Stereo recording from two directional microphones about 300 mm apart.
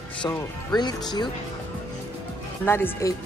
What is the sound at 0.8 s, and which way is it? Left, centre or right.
Speech, centre.